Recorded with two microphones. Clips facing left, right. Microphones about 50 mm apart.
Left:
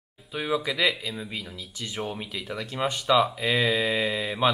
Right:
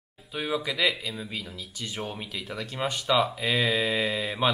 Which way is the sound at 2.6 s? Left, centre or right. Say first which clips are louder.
Left 2 dB; centre.